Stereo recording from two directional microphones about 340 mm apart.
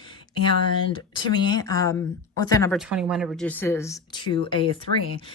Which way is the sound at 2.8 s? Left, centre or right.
Centre.